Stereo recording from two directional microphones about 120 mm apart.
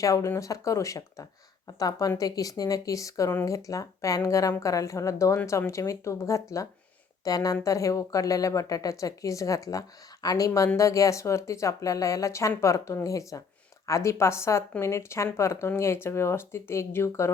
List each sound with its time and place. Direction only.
0.0 s speech: 25° left (ahead or behind)